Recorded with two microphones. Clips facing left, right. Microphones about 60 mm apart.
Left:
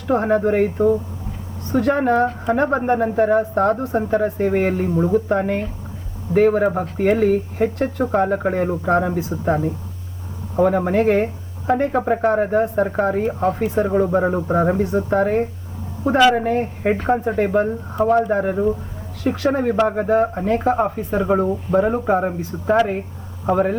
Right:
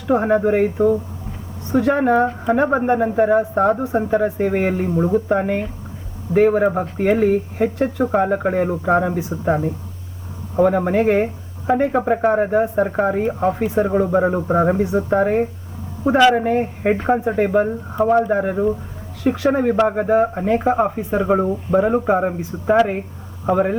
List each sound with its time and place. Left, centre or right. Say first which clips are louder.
0.1 s speech: right 1 dB; centre